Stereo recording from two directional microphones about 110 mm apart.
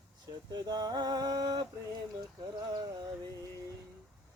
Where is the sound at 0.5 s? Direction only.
40° right (ahead or behind).